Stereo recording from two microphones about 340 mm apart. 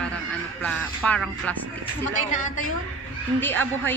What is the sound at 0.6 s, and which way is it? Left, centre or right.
A woman's voice, centre.